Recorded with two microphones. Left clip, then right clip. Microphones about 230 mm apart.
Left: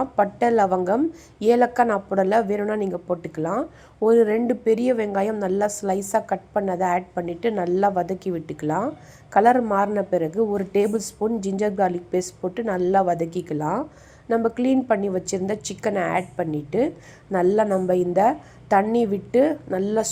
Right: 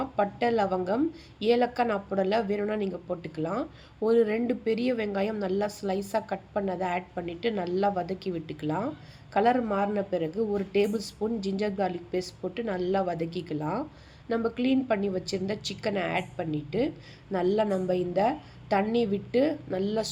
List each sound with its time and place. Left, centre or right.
0.0 s speech: centre